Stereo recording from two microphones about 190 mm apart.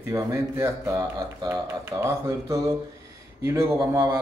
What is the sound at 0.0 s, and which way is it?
Speech, 15° right (ahead or behind).